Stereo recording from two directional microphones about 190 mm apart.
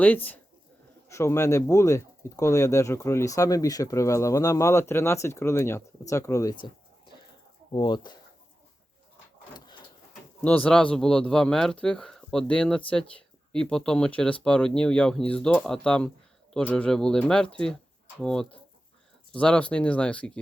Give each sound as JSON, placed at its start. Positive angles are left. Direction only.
{"t": 0.0, "sound": "speech", "side_deg": 10}
{"t": 7.7, "sound": "speech", "side_deg": 25}
{"t": 10.4, "sound": "speech", "side_deg": 5}